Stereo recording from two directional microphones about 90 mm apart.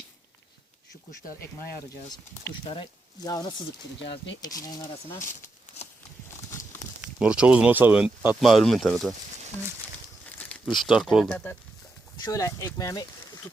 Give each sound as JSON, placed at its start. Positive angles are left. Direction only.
{"t": 2.6, "sound": "speech", "side_deg": 65}
{"t": 4.4, "sound": "speech", "side_deg": 45}
{"t": 7.0, "sound": "speech", "side_deg": -10}
{"t": 8.4, "sound": "speech", "side_deg": 0}
{"t": 10.8, "sound": "speech", "side_deg": -5}
{"t": 12.2, "sound": "speech", "side_deg": 40}